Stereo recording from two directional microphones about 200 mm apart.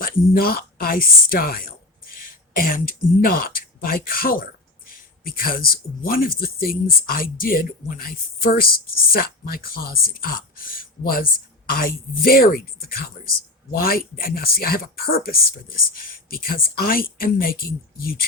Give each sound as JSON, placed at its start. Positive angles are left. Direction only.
{"t": 0.0, "sound": "speech", "side_deg": 45}